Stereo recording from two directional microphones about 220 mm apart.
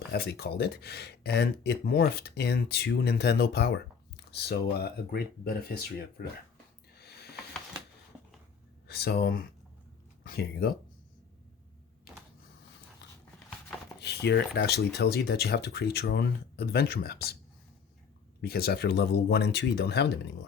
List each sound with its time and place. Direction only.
0.1 s speech: 45° left (ahead or behind)
7.0 s a sound: 45° left (ahead or behind)
8.9 s speech: 45° left (ahead or behind)
14.0 s speech: 50° left (ahead or behind)
18.4 s speech: 45° left (ahead or behind)